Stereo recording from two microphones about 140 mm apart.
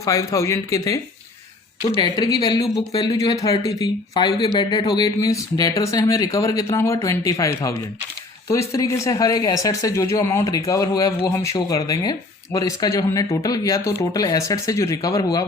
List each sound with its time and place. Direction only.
0.0 s speech: 25° left (ahead or behind)